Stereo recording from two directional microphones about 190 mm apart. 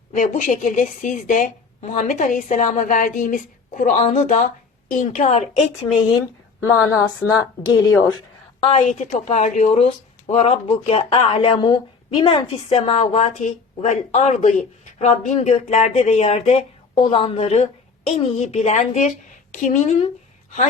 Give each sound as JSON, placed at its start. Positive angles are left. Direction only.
{"t": 0.1, "sound": "a woman's voice", "side_deg": 40}
{"t": 7.6, "sound": "speech", "side_deg": 20}
{"t": 8.6, "sound": "a woman's voice", "side_deg": 35}